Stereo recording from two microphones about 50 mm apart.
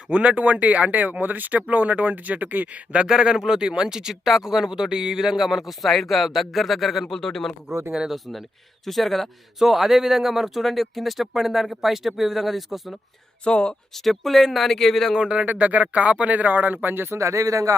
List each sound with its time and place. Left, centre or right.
0.1 s speech: right
2.9 s speech: centre
7.0 s speech: centre
7.9 s speech: centre
8.1 s speech: centre
13.4 s speech: centre
13.9 s speech: centre
15.1 s speech: centre
15.4 s speech: right
17.2 s speech: right